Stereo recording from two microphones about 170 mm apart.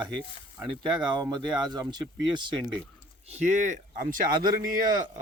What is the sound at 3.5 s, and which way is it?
Speech, 45° right (ahead or behind).